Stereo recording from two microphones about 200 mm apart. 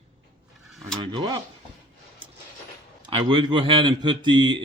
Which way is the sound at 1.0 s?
25° right (ahead or behind).